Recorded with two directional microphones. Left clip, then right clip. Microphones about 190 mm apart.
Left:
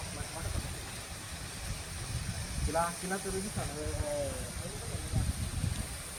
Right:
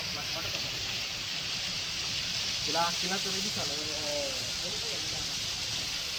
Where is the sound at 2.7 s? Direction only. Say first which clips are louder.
Right 1 dB; 45° left (ahead or behind).